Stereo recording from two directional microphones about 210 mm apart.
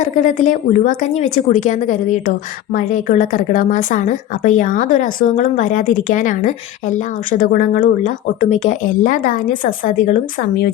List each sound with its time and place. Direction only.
0.0 s speech: 35° left (ahead or behind)